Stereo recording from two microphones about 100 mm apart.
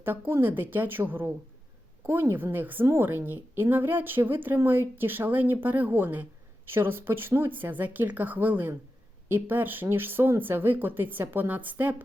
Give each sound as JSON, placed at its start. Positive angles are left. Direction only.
{"t": 0.0, "sound": "speech", "side_deg": -20}